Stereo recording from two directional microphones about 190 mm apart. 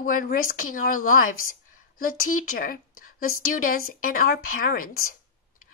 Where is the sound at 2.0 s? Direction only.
45° left (ahead or behind).